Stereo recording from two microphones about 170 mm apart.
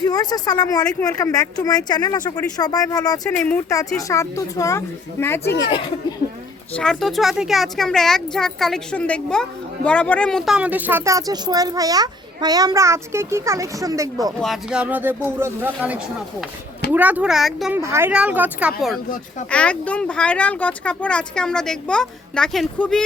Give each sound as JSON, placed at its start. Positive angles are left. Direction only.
{"t": 0.0, "sound": "speech", "side_deg": 25}
{"t": 3.3, "sound": "speech", "side_deg": 10}
{"t": 5.6, "sound": "speech", "side_deg": 30}
{"t": 6.7, "sound": "speech", "side_deg": 0}
{"t": 14.4, "sound": "speech", "side_deg": -5}
{"t": 17.7, "sound": "speech", "side_deg": -15}
{"t": 19.5, "sound": "speech", "side_deg": 5}